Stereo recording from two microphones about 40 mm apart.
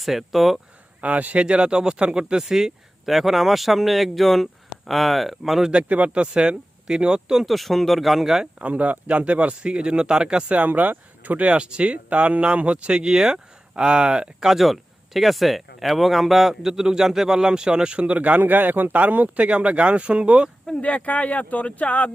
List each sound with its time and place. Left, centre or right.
0.0 s speech: centre
1.0 s speech: right; by 5.7 s centre
5.7 s speech: right
6.3 s speech: right
7.4 s speech: centre
8.5 s speech: right
10.7 s speech: right
11.4 s speech: right
14.4 s speech: centre; by 19.5 s right
19.5 s speech: right
20.8 s speech: left